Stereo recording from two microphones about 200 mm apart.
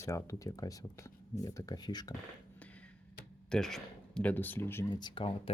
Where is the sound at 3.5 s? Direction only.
Centre (ahead or behind); by 5.5 s 25° left (ahead or behind).